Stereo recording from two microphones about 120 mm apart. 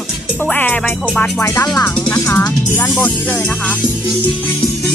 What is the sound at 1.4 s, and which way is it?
Speech, 25° left (ahead or behind).